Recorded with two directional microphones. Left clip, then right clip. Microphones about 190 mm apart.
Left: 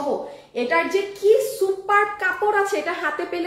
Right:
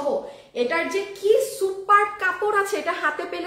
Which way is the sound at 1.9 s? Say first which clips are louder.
Right 2 dB; 15° right (ahead or behind).